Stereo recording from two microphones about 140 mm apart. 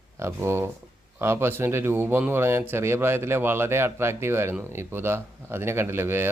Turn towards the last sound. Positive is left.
turn(degrees=-15)  # may be behind; listen again after turning